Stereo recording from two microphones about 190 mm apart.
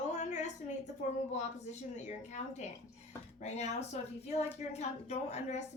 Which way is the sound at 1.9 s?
40° left (ahead or behind).